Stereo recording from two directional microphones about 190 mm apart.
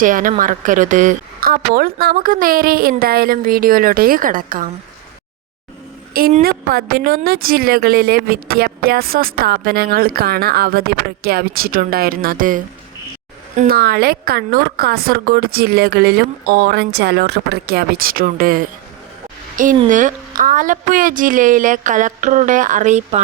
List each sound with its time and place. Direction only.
0.0 s speech: 45° right (ahead or behind)
6.1 s speech: 50° right (ahead or behind)
13.6 s speech: 55° right (ahead or behind); by 23.2 s 40° right (ahead or behind)